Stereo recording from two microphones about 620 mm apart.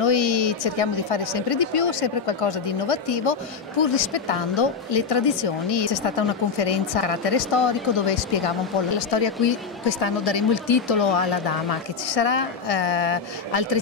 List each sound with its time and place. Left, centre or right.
0.0 s a woman's voice: left